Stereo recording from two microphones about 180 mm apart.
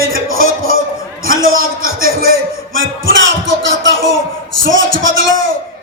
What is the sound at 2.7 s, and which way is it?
Music, 90° right.